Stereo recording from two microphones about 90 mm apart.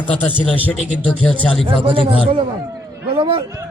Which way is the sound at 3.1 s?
65° right (ahead or behind).